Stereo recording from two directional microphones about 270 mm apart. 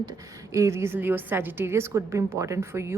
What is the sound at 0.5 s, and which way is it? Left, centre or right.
A woman's voice, centre.